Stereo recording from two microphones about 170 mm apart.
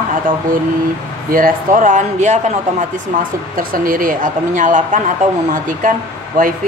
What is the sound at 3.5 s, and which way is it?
Speech, 55° right (ahead or behind).